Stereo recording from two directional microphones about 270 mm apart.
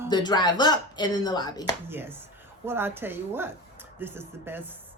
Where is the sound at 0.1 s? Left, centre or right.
Centre.